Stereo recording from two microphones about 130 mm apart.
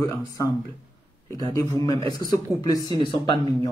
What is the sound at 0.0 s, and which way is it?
A man's voice, 30° left (ahead or behind).